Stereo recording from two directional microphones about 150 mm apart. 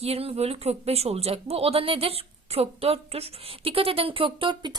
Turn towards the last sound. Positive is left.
turn(degrees=-30)  # may be behind; listen again after turning